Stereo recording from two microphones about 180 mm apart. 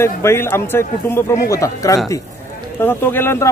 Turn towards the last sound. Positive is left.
turn(degrees=15)  # may be behind; listen again after turning